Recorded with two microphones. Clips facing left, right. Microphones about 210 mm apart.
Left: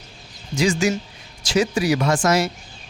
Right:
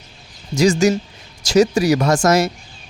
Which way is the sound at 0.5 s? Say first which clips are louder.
Right 5 dB; 40° right (ahead or behind).